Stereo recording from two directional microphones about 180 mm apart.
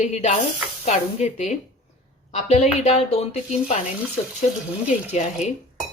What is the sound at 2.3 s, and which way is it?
Speech, 40° left (ahead or behind).